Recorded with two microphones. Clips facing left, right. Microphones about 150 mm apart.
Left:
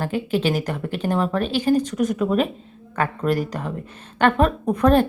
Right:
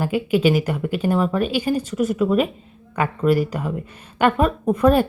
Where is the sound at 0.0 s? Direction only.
10° right (ahead or behind).